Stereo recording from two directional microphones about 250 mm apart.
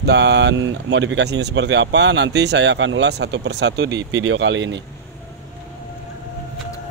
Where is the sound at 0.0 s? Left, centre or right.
Right.